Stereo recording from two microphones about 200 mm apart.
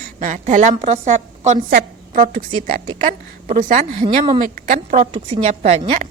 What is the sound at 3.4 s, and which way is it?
A woman's voice, 40° right (ahead or behind).